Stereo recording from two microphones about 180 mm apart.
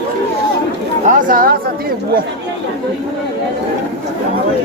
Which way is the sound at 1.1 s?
45° right (ahead or behind).